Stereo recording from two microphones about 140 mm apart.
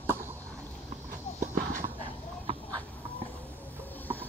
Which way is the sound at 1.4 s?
70° right (ahead or behind).